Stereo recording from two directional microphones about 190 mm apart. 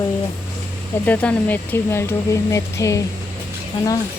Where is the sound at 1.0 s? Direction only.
10° left (ahead or behind).